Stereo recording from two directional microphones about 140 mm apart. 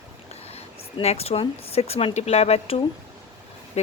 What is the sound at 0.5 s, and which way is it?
Speech, 45° left (ahead or behind).